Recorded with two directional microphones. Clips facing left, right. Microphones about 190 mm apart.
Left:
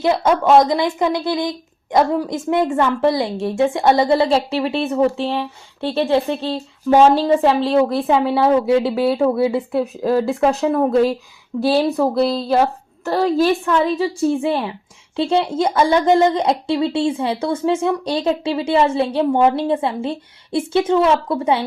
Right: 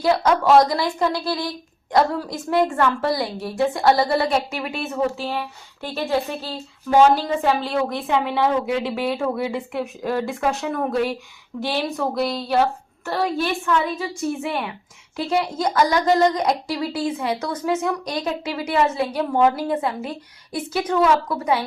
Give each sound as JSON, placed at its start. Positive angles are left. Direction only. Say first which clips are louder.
{"t": 0.0, "sound": "a woman's voice", "louder": "left 2 dB", "side_deg": 20}